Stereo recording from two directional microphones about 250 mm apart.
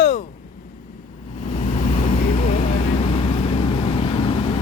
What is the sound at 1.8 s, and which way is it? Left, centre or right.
Vehicle, left.